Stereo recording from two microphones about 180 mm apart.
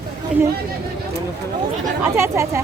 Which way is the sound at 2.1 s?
15° right (ahead or behind).